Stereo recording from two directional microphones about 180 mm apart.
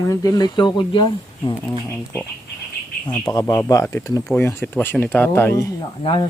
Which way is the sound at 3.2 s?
20° left (ahead or behind).